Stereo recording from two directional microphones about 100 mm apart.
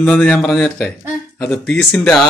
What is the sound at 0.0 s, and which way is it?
Speech, 10° left (ahead or behind).